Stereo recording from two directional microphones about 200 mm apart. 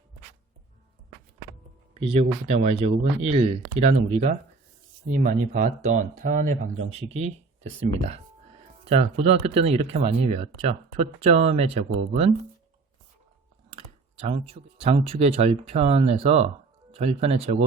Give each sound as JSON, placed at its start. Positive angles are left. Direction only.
{"t": 2.0, "sound": "speech", "side_deg": -30}
{"t": 13.7, "sound": "speech", "side_deg": -30}